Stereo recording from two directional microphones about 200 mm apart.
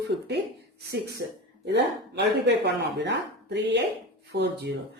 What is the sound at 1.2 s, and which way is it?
Speech, 55° right (ahead or behind).